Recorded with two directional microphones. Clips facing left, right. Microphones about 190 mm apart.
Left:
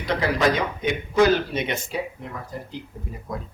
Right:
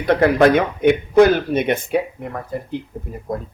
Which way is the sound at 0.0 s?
55° right (ahead or behind).